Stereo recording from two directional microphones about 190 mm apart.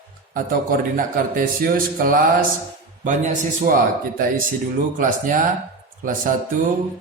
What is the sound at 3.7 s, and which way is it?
Speech, 50° right (ahead or behind).